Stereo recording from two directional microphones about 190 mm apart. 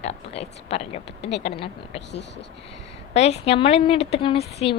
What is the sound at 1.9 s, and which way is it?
Speech, 65° left (ahead or behind).